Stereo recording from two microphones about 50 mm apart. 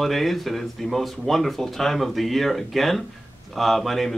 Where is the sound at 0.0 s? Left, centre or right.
Centre.